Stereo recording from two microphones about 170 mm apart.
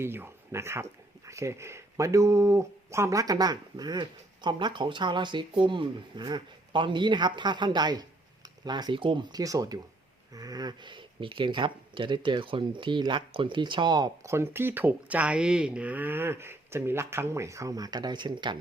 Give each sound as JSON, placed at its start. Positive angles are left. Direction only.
{"t": 0.0, "sound": "speech", "side_deg": -15}